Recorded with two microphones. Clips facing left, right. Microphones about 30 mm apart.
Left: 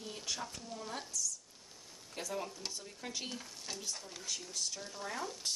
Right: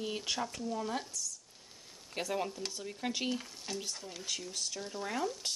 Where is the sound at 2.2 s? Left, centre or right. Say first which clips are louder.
Right 5 dB; right.